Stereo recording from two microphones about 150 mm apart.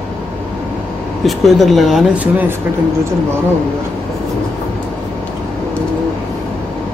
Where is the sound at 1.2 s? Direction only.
Centre (ahead or behind).